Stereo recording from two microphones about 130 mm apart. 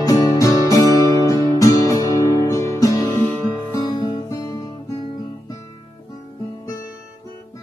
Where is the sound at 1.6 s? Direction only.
25° left (ahead or behind).